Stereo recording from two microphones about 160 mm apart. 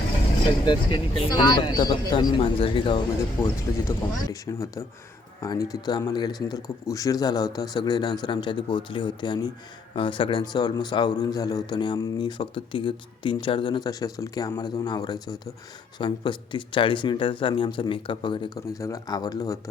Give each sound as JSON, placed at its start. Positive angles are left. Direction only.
{"t": 0.6, "sound": "speech", "side_deg": 30}
{"t": 3.4, "sound": "speech", "side_deg": 20}